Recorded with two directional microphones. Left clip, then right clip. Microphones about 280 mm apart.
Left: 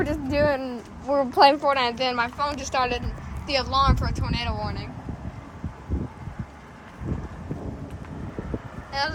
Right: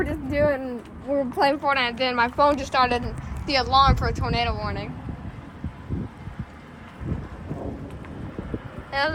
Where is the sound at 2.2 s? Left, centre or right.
Centre.